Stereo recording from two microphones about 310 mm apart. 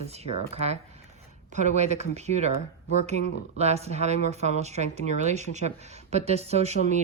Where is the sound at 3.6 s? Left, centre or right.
Right.